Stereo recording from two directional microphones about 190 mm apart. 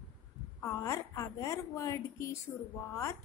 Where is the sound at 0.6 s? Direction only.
15° left (ahead or behind).